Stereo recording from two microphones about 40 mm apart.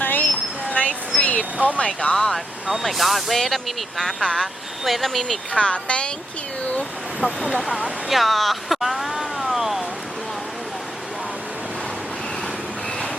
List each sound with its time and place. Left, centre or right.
0.0 s a sound: left
0.7 s vehicle: left
1.5 s speech: right
1.9 s speech: left
2.1 s speech: centre
2.8 s speech: centre
4.8 s speech: centre
5.5 s speech: left
7.7 s speech: centre
8.1 s a sound: centre